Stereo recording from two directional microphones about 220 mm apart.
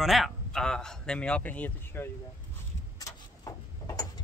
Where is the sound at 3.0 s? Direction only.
15° left (ahead or behind).